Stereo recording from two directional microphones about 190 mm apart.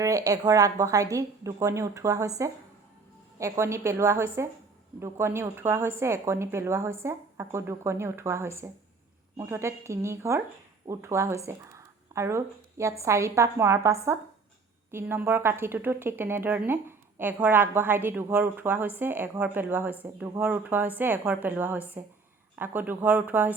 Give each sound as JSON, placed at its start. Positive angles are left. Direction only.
{"t": 0.0, "sound": "a woman's voice", "side_deg": -20}